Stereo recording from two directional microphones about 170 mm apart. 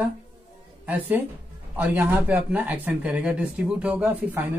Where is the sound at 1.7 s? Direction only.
10° right (ahead or behind).